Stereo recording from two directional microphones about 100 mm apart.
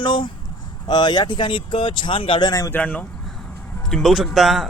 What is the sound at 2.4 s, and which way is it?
Speech, 35° left (ahead or behind).